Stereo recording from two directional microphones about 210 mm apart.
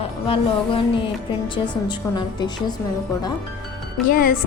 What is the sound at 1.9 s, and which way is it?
Speech, 20° left (ahead or behind).